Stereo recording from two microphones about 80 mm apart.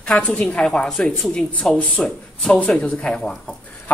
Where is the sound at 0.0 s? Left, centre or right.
Centre.